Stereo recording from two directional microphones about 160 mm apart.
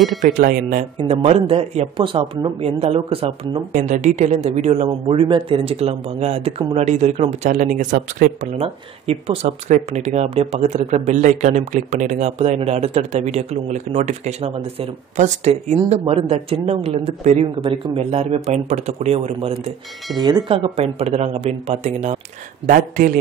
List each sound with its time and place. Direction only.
0.2 s speech: 60° right (ahead or behind)
0.9 s speech: 40° right (ahead or behind)
3.7 s speech: 50° right (ahead or behind)
20.2 s speech: 25° right (ahead or behind); by 23.1 s 55° right (ahead or behind)